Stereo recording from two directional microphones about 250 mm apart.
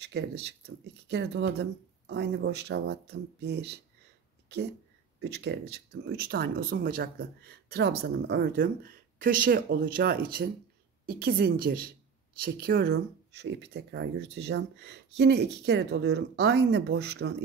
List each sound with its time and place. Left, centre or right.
0.0 s speech: right
5.2 s speech: right